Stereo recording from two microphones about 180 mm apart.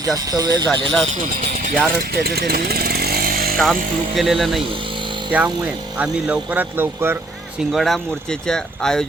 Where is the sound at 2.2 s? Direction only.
60° right (ahead or behind).